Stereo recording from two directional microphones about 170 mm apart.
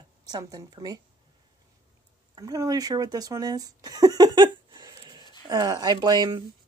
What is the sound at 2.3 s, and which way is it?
Speech, 20° right (ahead or behind).